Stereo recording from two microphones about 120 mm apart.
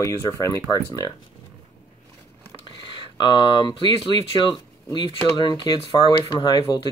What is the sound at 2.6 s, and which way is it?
Speech, 45° left (ahead or behind).